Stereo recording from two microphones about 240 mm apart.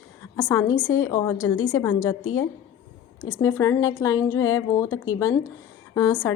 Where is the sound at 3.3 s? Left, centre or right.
Centre.